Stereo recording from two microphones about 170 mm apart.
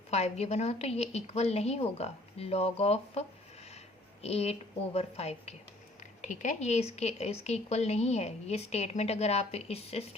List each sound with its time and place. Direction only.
0.1 s speech: 40° left (ahead or behind)